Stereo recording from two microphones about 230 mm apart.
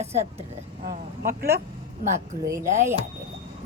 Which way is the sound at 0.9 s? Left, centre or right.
Right.